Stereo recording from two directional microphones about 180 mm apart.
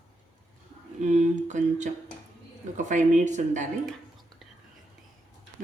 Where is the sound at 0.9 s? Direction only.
40° right (ahead or behind).